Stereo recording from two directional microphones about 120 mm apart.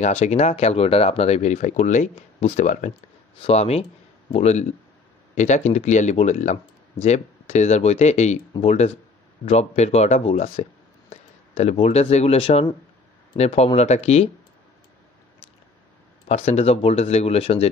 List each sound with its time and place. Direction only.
0.0 s speech: 70° left (ahead or behind); by 2.9 s 90° left
3.4 s speech: 60° left (ahead or behind)
5.3 s speech: 85° left; by 14.3 s 65° left (ahead or behind)
16.3 s speech: 65° left (ahead or behind)